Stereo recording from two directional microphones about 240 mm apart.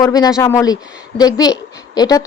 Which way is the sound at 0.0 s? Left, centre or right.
Centre.